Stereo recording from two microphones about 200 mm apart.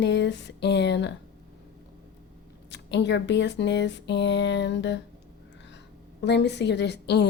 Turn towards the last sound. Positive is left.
turn(degrees=55)  # may be behind; listen again after turning